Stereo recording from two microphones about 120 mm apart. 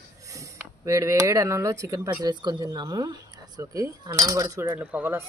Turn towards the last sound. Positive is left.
turn(degrees=-15)  # may be behind; listen again after turning